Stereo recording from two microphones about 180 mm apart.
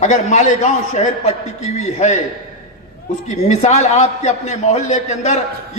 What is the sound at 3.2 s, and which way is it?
A man's voice, 40° left (ahead or behind).